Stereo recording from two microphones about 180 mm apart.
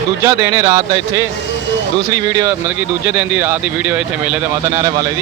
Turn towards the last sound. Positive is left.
turn(degrees=-5)  # may be behind; listen again after turning